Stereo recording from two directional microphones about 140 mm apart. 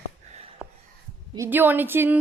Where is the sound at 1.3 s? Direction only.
15° right (ahead or behind).